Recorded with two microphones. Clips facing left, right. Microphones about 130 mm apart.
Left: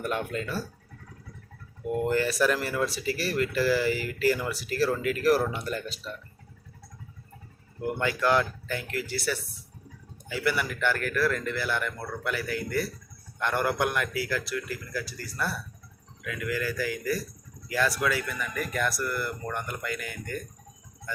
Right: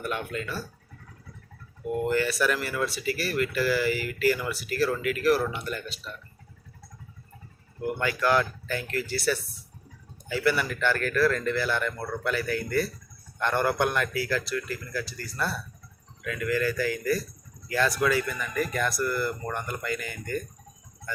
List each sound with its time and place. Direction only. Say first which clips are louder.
0.0 s speech: left 1 dB; 40° left (ahead or behind)
2.0 s speech: left 1 dB; 35° left (ahead or behind)
7.8 s a man's voice: even; 25° left (ahead or behind); by 20.4 s centre (ahead or behind)